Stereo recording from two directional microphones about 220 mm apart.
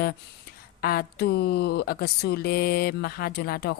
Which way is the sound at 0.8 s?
45° left (ahead or behind).